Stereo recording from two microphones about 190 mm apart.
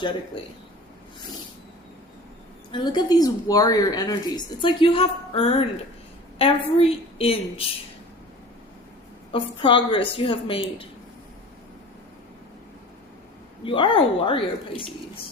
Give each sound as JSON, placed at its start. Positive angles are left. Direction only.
{"t": 2.7, "sound": "a woman's voice", "side_deg": 25}
{"t": 9.3, "sound": "speech", "side_deg": 25}
{"t": 13.7, "sound": "speech", "side_deg": 25}